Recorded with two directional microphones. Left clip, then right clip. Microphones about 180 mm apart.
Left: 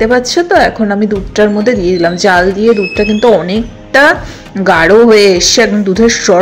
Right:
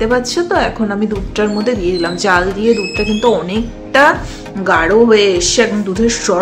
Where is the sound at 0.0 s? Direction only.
25° left (ahead or behind).